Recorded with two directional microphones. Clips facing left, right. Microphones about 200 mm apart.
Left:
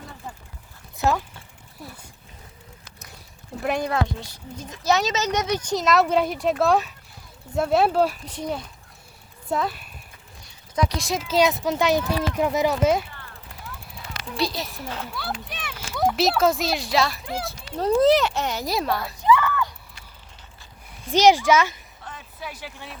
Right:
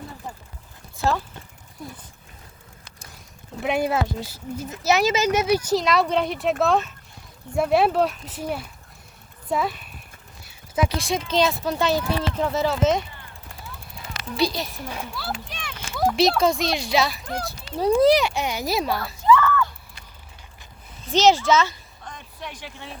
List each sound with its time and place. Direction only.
0.9 s speech: 20° left (ahead or behind)
3.6 s speech: 5° right (ahead or behind)
14.3 s speech: centre (ahead or behind)
17.9 s speech: 10° right (ahead or behind)
18.5 s speech: centre (ahead or behind)
19.2 s a sound: 15° left (ahead or behind)
21.0 s speech: 10° left (ahead or behind)
22.1 s a sound: 5° left (ahead or behind)